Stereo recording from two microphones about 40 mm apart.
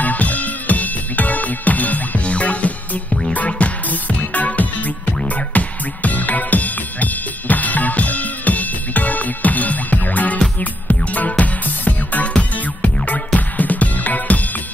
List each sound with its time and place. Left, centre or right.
0.0 s music: left
3.1 s music: centre
3.3 s music: left